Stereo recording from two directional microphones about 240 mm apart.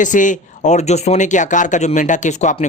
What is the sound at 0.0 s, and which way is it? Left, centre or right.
Speech, left.